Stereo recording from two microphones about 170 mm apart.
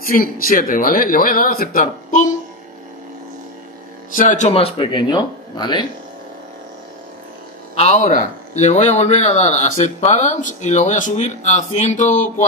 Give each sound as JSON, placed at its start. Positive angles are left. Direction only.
{"t": 0.0, "sound": "speech", "side_deg": 55}
{"t": 4.1, "sound": "speech", "side_deg": 50}
{"t": 7.7, "sound": "speech", "side_deg": 40}